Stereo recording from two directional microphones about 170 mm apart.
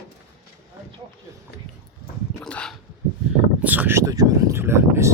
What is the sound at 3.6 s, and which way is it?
Speech, 10° right (ahead or behind).